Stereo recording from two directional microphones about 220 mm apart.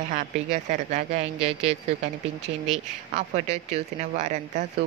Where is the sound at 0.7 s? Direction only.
35° right (ahead or behind).